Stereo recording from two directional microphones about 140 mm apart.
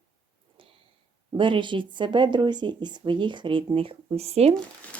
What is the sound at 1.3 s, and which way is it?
Speech, 35° right (ahead or behind).